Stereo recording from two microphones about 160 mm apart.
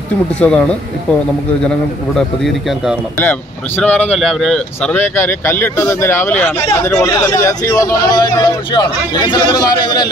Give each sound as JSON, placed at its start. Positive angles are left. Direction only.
{"t": 0.4, "sound": "speech", "side_deg": 5}
{"t": 2.1, "sound": "speech", "side_deg": 0}
{"t": 3.2, "sound": "speech", "side_deg": 10}